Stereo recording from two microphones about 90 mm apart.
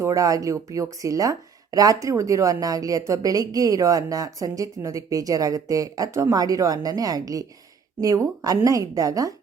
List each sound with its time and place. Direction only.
0.0 s speech: 35° right (ahead or behind)
6.3 s a woman's voice: 45° right (ahead or behind)